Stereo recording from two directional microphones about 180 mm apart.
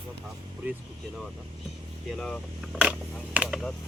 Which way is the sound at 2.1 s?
Centre (ahead or behind).